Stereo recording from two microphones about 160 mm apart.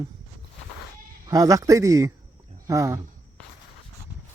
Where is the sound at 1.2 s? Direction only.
25° right (ahead or behind).